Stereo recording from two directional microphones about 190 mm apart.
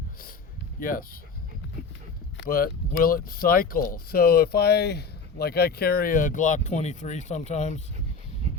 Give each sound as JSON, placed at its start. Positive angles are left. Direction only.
{"t": 0.8, "sound": "speech", "side_deg": 45}
{"t": 2.4, "sound": "speech", "side_deg": 50}